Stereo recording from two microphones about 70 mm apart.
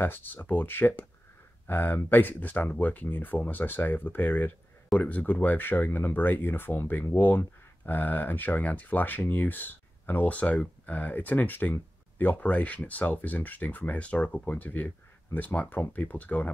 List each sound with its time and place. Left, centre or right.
0.0 s speech: left